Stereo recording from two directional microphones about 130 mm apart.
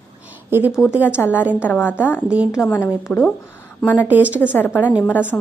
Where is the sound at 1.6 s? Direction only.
15° left (ahead or behind).